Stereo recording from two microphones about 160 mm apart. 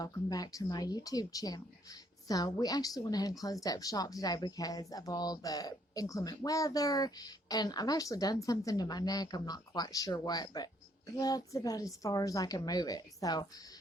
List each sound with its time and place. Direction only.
0.0 s a woman's voice: 25° left (ahead or behind)